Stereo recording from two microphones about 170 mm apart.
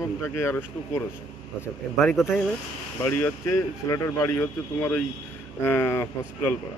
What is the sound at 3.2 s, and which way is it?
Speech, 15° left (ahead or behind).